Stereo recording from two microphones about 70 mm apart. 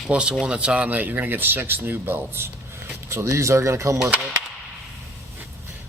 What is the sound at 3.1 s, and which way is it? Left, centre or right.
A man's voice, right.